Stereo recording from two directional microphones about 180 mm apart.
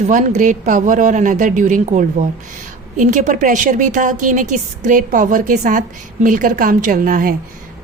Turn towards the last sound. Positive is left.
turn(degrees=-50)  # may be behind; listen again after turning